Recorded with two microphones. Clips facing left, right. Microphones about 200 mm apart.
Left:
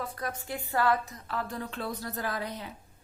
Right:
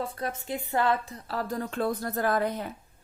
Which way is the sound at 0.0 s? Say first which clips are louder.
Right 3 dB; 25° right (ahead or behind).